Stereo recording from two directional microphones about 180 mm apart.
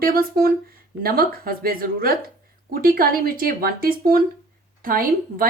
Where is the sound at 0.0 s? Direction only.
55° right (ahead or behind).